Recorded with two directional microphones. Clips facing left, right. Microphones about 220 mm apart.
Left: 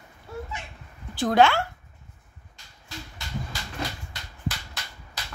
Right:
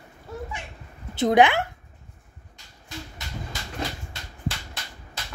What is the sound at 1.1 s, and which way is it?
Speech, 20° right (ahead or behind).